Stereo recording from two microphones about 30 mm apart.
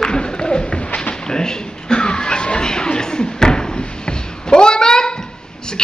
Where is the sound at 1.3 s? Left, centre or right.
Left.